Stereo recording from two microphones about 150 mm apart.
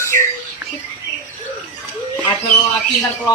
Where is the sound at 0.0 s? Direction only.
20° left (ahead or behind).